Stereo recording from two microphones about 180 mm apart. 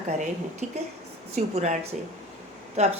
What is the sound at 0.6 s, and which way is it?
A woman's voice, 40° right (ahead or behind).